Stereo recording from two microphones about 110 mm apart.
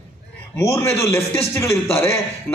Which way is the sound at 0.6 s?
25° left (ahead or behind).